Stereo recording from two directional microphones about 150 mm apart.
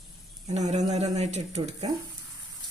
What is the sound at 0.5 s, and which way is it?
Speech, 50° right (ahead or behind).